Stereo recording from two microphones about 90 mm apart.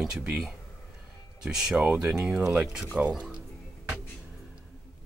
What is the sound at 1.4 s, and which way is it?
Speech, 10° right (ahead or behind).